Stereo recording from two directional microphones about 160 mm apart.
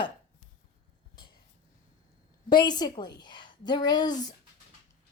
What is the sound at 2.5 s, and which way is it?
A woman's voice, 25° left (ahead or behind).